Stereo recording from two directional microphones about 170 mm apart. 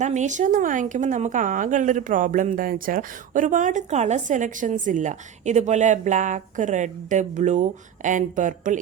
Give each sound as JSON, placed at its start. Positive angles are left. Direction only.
{"t": 0.0, "sound": "a woman's voice", "side_deg": -45}